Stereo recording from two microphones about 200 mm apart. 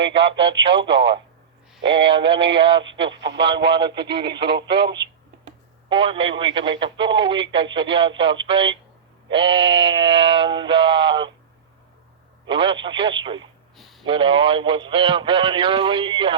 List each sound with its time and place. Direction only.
0.1 s speech: 25° right (ahead or behind)
3.2 s speech: 60° right (ahead or behind)
3.8 s speech: 25° right (ahead or behind)
12.5 s speech: 25° right (ahead or behind)
13.7 s a sound: centre (ahead or behind)
14.0 s speech: 25° right (ahead or behind)